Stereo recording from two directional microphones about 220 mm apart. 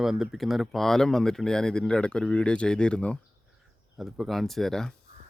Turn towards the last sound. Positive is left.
turn(degrees=0)  # may be behind; listen again after turning